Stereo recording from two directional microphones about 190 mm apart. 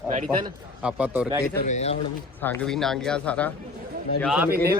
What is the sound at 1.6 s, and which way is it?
Speech, 35° left (ahead or behind).